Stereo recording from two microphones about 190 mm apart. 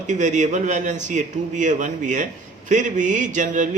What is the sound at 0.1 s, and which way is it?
A man's voice, 40° right (ahead or behind).